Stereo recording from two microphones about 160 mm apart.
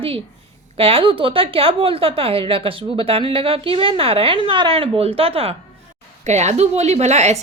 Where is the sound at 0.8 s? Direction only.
35° right (ahead or behind).